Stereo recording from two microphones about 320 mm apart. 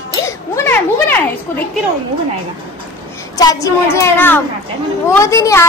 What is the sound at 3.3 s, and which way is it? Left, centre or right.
A woman's voice, centre.